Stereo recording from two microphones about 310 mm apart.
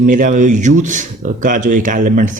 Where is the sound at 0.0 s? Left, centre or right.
Right.